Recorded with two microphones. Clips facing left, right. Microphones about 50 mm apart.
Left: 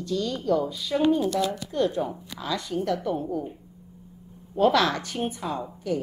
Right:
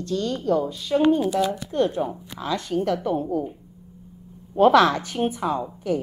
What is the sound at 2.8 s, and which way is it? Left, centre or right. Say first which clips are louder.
Speech: right 3 dB; right.